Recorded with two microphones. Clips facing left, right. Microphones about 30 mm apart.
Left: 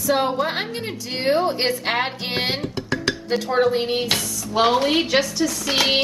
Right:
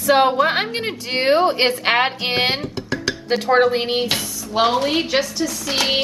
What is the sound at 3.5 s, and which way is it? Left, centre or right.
Speech, right.